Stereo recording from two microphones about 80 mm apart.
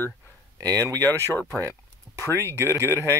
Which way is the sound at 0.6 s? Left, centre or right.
Right.